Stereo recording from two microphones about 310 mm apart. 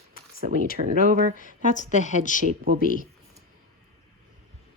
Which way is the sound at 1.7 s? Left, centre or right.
Left.